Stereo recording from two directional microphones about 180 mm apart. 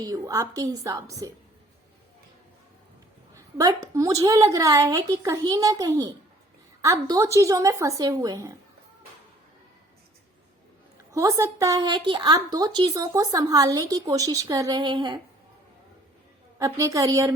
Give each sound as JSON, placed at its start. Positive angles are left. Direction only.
{"t": 0.0, "sound": "a woman's voice", "side_deg": -20}
{"t": 3.3, "sound": "a woman's voice", "side_deg": -20}
{"t": 11.1, "sound": "a woman's voice", "side_deg": -15}
{"t": 16.6, "sound": "a woman's voice", "side_deg": -15}